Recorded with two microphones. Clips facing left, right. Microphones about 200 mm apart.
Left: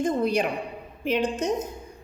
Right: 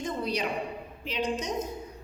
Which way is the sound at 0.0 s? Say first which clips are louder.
Left 7 dB; 50° left (ahead or behind).